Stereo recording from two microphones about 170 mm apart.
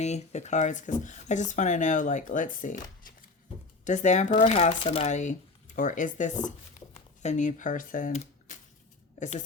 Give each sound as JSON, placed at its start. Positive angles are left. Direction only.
{"t": 0.0, "sound": "speech", "side_deg": 40}
{"t": 3.8, "sound": "speech", "side_deg": 45}
{"t": 4.8, "sound": "speech", "side_deg": 35}